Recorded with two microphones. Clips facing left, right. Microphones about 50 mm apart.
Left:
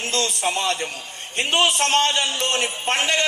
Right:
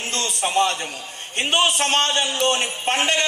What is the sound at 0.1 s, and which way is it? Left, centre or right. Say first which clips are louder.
Speech: right 1 dB; right.